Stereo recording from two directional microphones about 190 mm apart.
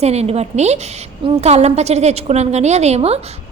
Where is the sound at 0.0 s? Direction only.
35° right (ahead or behind).